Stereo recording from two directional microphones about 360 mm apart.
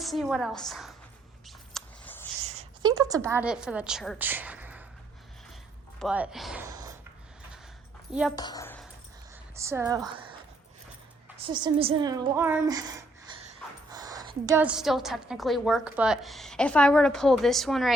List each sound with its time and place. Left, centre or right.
0.0 s a woman's voice: centre
1.5 s a sound: centre
2.5 s a woman's voice: centre
6.0 s speech: centre
8.4 s speech: centre
9.6 s a woman's voice: centre
11.3 s a woman's voice: centre